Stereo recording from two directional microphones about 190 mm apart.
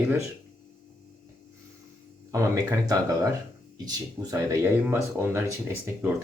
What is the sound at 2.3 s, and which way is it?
Speech, 15° right (ahead or behind).